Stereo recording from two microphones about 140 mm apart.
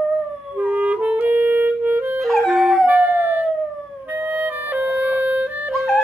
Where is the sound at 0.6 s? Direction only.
10° right (ahead or behind).